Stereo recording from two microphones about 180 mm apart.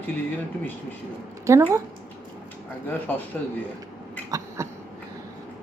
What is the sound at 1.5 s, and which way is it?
Speech, 15° right (ahead or behind).